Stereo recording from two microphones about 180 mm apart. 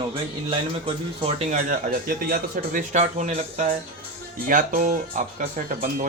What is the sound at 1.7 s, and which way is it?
Speech, 50° right (ahead or behind).